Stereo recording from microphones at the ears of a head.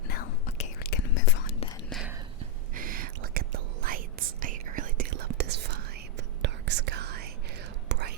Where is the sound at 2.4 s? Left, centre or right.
Right.